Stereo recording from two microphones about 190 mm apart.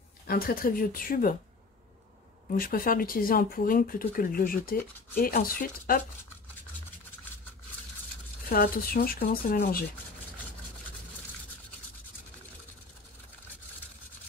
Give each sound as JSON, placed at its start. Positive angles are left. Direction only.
{"t": 0.3, "sound": "speech", "side_deg": 50}
{"t": 2.5, "sound": "speech", "side_deg": 50}
{"t": 8.5, "sound": "speech", "side_deg": 50}